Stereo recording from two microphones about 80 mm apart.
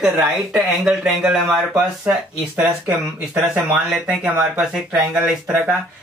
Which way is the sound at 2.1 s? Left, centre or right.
Right.